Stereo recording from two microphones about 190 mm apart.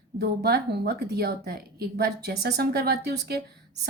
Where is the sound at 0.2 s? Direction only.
60° right (ahead or behind).